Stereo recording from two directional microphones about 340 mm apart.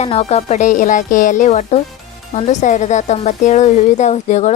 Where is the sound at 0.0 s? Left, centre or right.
Centre.